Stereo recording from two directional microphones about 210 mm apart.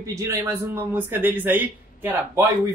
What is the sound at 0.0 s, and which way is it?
A man's voice, 15° right (ahead or behind).